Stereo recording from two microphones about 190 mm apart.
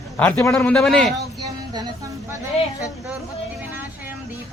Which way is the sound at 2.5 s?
35° left (ahead or behind).